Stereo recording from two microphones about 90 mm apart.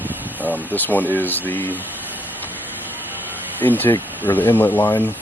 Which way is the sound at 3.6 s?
20° left (ahead or behind).